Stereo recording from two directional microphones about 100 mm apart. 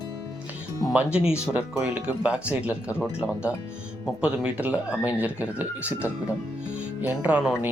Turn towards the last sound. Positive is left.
turn(degrees=-10)  # may be behind; listen again after turning